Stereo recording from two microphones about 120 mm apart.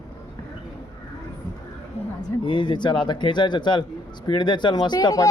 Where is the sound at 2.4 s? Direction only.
40° left (ahead or behind).